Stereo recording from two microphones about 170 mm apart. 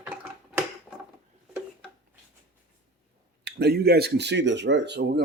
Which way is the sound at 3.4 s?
70° right (ahead or behind).